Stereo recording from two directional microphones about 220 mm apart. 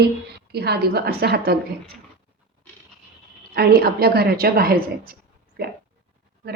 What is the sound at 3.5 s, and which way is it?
A woman's voice, 45° right (ahead or behind).